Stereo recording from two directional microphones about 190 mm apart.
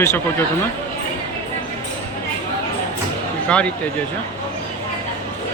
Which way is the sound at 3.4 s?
5° left (ahead or behind).